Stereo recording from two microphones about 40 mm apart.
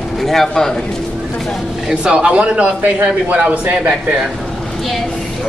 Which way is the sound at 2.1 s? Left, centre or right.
Right.